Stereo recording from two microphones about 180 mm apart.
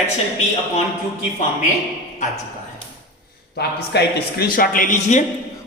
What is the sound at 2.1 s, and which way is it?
Speech, 40° left (ahead or behind).